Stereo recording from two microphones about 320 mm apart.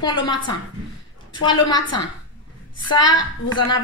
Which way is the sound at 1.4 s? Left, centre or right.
Centre.